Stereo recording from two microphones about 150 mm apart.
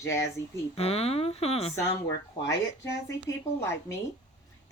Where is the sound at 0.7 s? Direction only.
45° left (ahead or behind).